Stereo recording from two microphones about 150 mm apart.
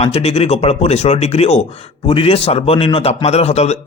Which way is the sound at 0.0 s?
40° left (ahead or behind).